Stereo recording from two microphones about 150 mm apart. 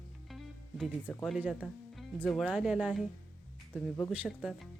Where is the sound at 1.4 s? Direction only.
10° right (ahead or behind).